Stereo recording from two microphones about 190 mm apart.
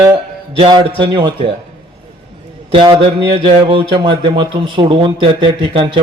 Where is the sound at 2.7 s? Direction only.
25° right (ahead or behind).